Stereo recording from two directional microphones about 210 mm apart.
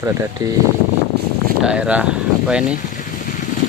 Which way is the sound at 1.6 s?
5° right (ahead or behind).